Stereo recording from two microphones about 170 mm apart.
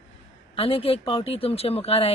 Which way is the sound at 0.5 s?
35° left (ahead or behind).